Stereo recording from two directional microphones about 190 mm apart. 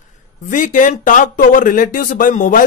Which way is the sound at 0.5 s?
45° left (ahead or behind).